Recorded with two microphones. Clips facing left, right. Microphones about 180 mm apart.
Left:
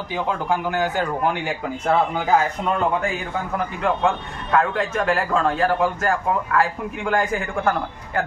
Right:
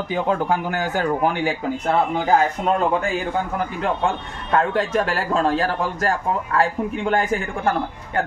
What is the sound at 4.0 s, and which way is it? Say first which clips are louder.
A man's voice: left 1 dB; 35° right (ahead or behind).